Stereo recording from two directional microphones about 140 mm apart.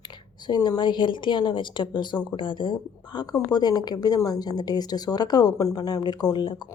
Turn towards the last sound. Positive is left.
turn(degrees=30)  # may be behind; listen again after turning